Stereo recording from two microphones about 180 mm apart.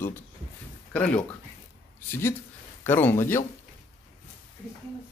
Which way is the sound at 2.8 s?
10° left (ahead or behind).